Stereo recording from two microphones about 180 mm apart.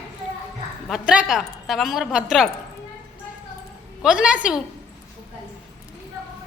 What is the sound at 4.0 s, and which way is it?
Speech, 5° right (ahead or behind).